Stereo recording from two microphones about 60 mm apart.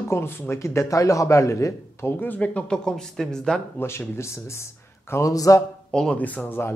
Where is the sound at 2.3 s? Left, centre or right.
Centre.